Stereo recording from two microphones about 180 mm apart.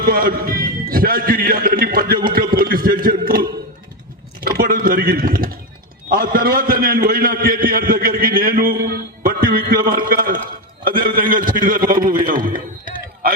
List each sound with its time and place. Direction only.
0.0 s a man's voice: 55° right (ahead or behind)
4.4 s typing: 50° right (ahead or behind)
6.1 s a man's voice: 55° right (ahead or behind)